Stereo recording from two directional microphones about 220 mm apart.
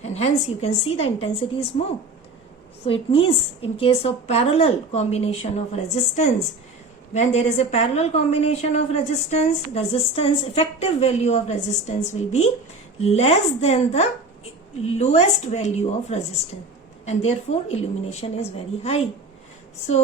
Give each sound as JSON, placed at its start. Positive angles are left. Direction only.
{"t": 0.0, "sound": "a woman's voice", "side_deg": 30}
{"t": 2.8, "sound": "a woman's voice", "side_deg": 25}